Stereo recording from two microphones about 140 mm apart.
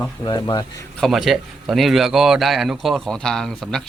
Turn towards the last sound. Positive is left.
turn(degrees=5)  # may be behind; listen again after turning